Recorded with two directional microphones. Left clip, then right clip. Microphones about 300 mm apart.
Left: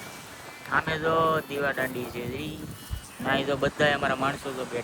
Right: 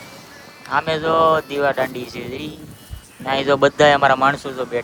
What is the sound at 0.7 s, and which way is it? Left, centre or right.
Speech, centre.